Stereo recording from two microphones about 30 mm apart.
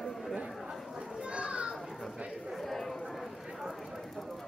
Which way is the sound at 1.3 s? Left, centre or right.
Right.